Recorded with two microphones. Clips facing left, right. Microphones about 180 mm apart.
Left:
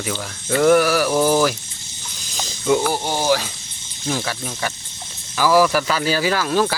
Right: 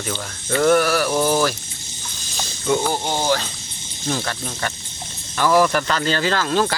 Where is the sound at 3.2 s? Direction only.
10° left (ahead or behind).